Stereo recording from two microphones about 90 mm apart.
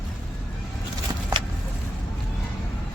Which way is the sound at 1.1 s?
45° right (ahead or behind).